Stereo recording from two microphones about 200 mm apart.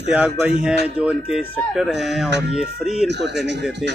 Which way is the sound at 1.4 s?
10° left (ahead or behind).